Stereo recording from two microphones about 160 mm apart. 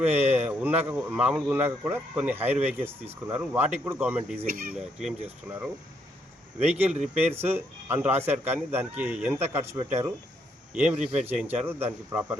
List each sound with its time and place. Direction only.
0.0 s speech: 10° right (ahead or behind)
4.4 s speech: 60° right (ahead or behind)
4.7 s speech: 5° right (ahead or behind)
7.1 s speech: 15° right (ahead or behind)